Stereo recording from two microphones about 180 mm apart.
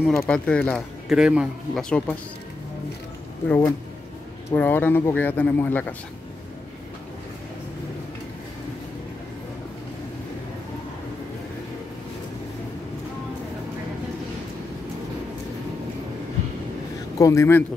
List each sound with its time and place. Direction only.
0.2 s speech: 5° left (ahead or behind)
3.4 s speech: 15° left (ahead or behind)
17.2 s speech: 15° left (ahead or behind)